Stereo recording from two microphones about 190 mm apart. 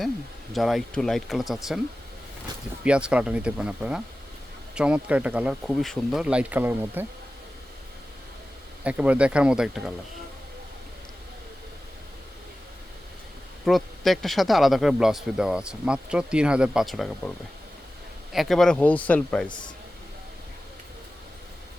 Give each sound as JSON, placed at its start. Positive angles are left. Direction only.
{"t": 0.5, "sound": "speech", "side_deg": 0}
{"t": 2.8, "sound": "speech", "side_deg": -5}
{"t": 8.8, "sound": "speech", "side_deg": -5}
{"t": 13.7, "sound": "speech", "side_deg": 0}